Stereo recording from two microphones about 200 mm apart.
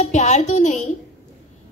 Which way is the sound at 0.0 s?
35° left (ahead or behind).